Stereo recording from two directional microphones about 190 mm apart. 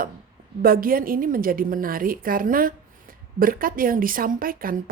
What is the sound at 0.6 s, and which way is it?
A woman's voice, 50° right (ahead or behind).